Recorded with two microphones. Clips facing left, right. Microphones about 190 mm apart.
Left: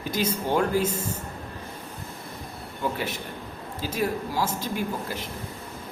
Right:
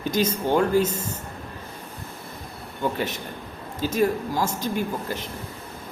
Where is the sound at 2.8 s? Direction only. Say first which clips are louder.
Right 3 dB; 5° left (ahead or behind).